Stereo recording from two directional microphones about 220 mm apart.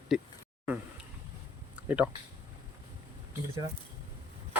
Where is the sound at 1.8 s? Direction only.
5° right (ahead or behind).